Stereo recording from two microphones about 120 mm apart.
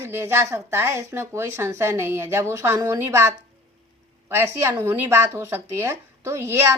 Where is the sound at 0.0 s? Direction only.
20° right (ahead or behind).